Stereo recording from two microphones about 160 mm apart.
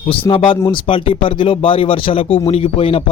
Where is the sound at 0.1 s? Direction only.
35° left (ahead or behind).